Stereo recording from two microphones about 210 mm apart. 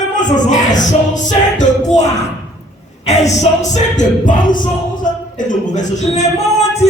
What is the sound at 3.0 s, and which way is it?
Music, 35° left (ahead or behind).